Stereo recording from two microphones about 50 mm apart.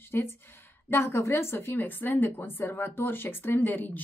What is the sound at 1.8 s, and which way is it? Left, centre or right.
Speech, left.